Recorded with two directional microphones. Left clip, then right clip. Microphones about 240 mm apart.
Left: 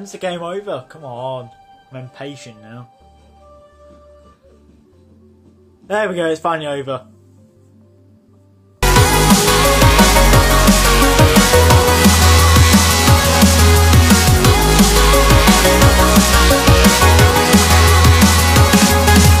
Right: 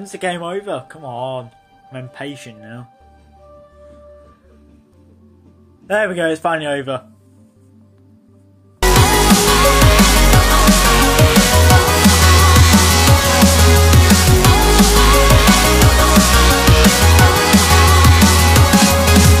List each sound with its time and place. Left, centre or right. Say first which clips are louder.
0.0 s speech: right 1 dB; centre
5.9 s speech: right 1 dB; centre
8.9 s music: even; centre